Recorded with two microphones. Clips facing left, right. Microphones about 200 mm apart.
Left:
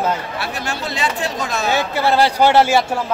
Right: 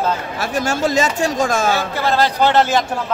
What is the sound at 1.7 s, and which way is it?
A man's voice, 15° left (ahead or behind).